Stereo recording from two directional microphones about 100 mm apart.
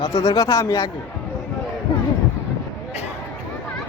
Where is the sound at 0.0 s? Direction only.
35° left (ahead or behind).